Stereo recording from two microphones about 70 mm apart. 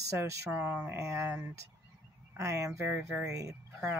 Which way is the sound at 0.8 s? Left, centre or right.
Right.